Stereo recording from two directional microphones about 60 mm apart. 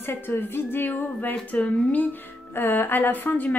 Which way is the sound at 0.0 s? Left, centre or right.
Left.